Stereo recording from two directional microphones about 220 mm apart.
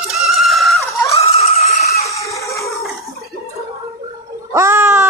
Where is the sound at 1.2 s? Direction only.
25° left (ahead or behind).